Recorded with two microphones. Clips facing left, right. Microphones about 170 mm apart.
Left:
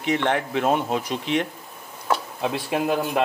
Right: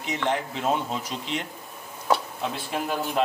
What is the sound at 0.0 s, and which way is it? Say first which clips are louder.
Speech: left 4 dB; 60° left (ahead or behind).